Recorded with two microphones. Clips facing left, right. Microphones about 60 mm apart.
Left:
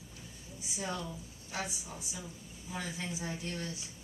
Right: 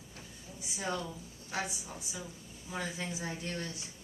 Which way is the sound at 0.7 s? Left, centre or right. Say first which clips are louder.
Right 2 dB; right.